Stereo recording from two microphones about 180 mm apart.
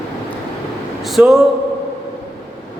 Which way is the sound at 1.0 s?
Centre (ahead or behind).